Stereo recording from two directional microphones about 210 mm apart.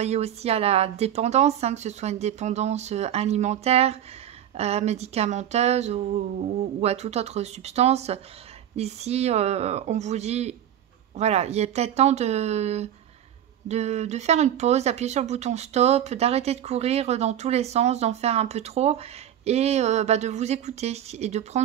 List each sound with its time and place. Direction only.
0.0 s speech: 30° right (ahead or behind)